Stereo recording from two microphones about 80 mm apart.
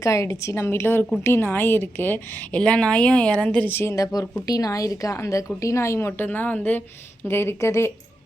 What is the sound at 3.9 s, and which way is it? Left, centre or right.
A woman's voice, left.